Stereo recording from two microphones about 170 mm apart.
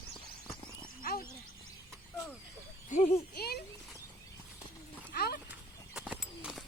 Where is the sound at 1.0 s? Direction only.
60° left (ahead or behind).